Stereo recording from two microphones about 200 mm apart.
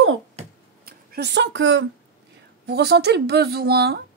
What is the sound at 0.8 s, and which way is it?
Speech, 50° right (ahead or behind).